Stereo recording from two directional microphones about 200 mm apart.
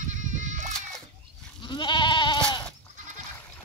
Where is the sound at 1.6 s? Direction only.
25° left (ahead or behind).